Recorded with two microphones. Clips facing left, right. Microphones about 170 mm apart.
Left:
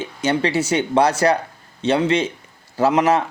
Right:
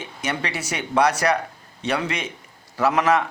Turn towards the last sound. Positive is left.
turn(degrees=25)  # may be behind; listen again after turning